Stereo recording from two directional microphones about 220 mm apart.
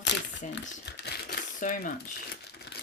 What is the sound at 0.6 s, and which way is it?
Crumpling, 50° left (ahead or behind).